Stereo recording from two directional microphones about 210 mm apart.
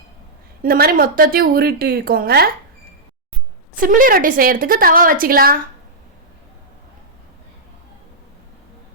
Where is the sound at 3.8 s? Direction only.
40° right (ahead or behind).